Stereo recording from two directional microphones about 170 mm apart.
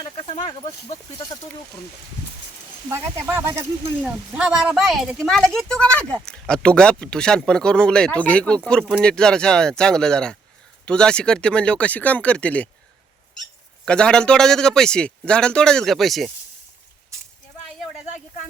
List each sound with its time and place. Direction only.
0.0 s speech: 30° left (ahead or behind)
2.9 s speech: 15° right (ahead or behind); by 12.6 s 10° left (ahead or behind)
13.8 s speech: 5° left (ahead or behind)